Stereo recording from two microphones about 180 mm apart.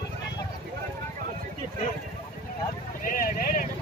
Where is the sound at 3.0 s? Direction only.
50° left (ahead or behind).